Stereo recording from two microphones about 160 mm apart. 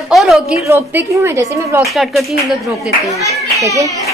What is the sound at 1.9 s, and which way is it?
A woman's voice, centre (ahead or behind).